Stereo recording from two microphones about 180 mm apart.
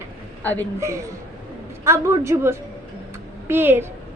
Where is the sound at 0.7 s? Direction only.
15° right (ahead or behind).